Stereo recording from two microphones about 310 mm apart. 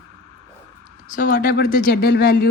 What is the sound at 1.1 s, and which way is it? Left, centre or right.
Speech, left.